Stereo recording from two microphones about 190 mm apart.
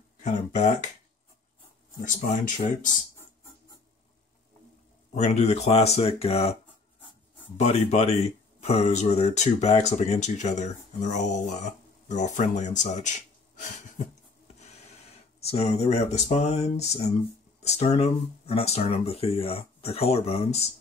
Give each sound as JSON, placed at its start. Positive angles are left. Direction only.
{"t": 0.2, "sound": "speech", "side_deg": 40}
{"t": 2.0, "sound": "speech", "side_deg": 45}
{"t": 5.1, "sound": "speech", "side_deg": 35}
{"t": 15.4, "sound": "speech", "side_deg": 35}